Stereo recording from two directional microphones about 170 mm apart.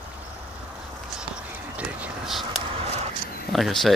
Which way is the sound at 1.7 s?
5° right (ahead or behind).